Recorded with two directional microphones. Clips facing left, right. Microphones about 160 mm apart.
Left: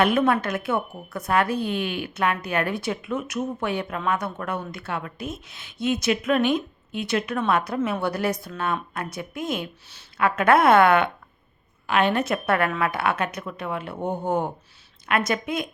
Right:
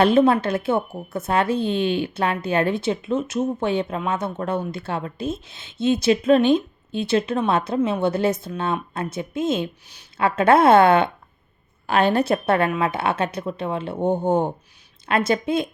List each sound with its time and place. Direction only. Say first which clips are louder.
0.0 s a woman's voice: right 4 dB; 30° right (ahead or behind)